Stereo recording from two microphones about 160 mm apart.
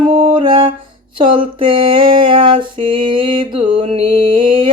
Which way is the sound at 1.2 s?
30° right (ahead or behind).